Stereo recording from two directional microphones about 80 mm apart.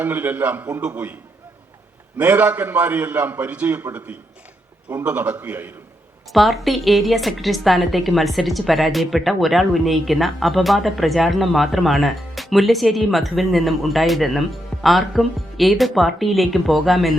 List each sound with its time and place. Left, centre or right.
0.0 s a man's voice: right
2.1 s a man's voice: right
5.0 s a man's voice: centre
6.3 s a woman's voice: centre